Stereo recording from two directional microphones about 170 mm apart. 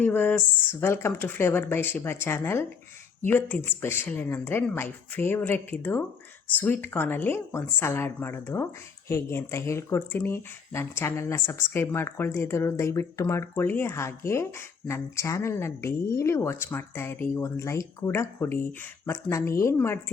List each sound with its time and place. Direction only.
0.0 s speech: 10° left (ahead or behind)